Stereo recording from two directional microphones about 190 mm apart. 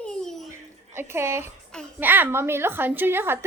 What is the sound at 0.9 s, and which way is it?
A woman's voice, 15° right (ahead or behind).